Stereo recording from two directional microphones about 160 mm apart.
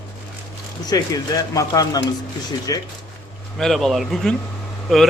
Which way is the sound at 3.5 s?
Centre (ahead or behind).